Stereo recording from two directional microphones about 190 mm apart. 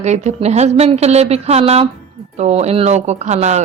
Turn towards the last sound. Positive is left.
turn(degrees=-35)  # may be behind; listen again after turning